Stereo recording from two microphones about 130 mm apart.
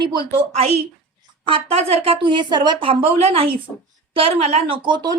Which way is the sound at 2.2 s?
35° right (ahead or behind).